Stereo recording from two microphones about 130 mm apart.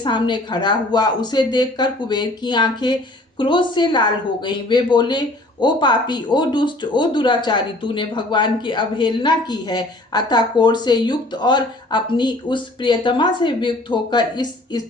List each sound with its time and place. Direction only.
0.0 s speech: 35° left (ahead or behind)